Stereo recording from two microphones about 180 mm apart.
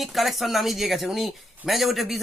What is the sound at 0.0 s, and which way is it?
A man's voice, centre (ahead or behind).